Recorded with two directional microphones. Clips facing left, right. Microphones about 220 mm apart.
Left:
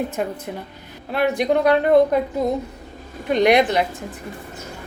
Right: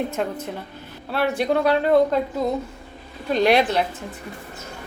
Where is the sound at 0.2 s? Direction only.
10° left (ahead or behind).